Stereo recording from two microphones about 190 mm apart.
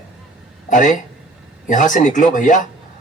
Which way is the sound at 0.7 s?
40° left (ahead or behind).